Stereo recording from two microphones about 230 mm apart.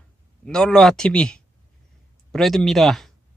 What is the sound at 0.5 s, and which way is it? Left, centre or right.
Speech, centre.